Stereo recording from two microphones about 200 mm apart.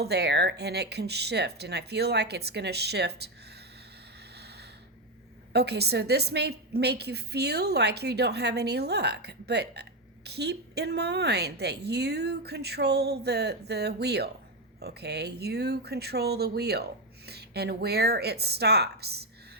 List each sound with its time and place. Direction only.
0.0 s a woman's voice: 55° right (ahead or behind)
5.5 s a woman's voice: 55° right (ahead or behind)